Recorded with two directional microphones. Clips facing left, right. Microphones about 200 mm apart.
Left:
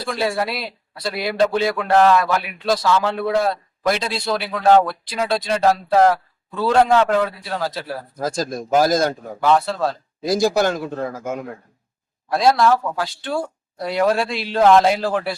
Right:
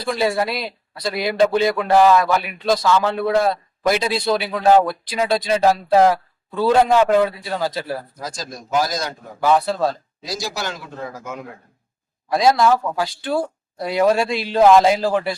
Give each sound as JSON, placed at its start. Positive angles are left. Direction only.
{"t": 0.0, "sound": "speech", "side_deg": 0}
{"t": 8.2, "sound": "a man's voice", "side_deg": 50}
{"t": 9.4, "sound": "speech", "side_deg": 0}
{"t": 10.2, "sound": "a man's voice", "side_deg": 55}
{"t": 12.3, "sound": "speech", "side_deg": 0}